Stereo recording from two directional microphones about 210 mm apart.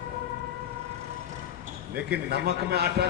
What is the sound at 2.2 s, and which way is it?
Speech, 50° right (ahead or behind).